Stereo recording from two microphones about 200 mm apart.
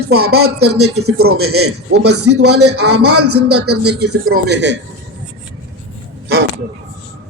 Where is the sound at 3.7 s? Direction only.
55° right (ahead or behind).